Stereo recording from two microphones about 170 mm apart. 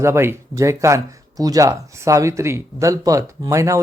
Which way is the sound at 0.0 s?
15° right (ahead or behind).